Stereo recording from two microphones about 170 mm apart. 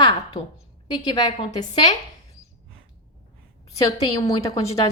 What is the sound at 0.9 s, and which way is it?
A woman's voice, 25° left (ahead or behind).